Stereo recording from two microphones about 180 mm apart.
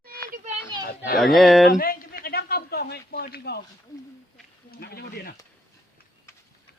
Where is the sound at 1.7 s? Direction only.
55° left (ahead or behind).